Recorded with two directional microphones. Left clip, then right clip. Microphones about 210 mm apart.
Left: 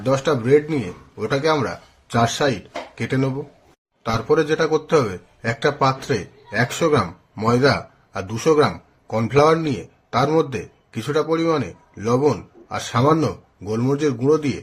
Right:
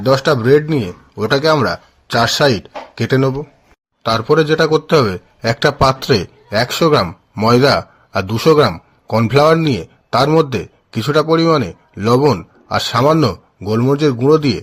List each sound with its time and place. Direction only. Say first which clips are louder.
0.0 s a man's voice: right 7 dB; 40° right (ahead or behind)